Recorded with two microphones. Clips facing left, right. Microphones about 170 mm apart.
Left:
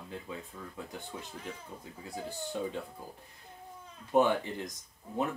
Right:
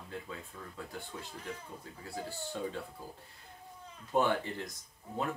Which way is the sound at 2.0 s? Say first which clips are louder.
Left 2 dB; 15° left (ahead or behind).